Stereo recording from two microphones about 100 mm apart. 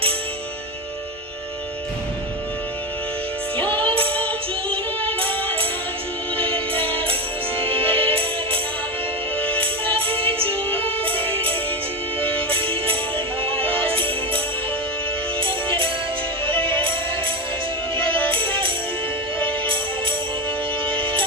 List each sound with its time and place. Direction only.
3.6 s music: 15° left (ahead or behind)
6.4 s music: 65° right (ahead or behind)
9.9 s music: 65° right (ahead or behind)
12.5 s music: 60° right (ahead or behind)
17.9 s music: 60° right (ahead or behind)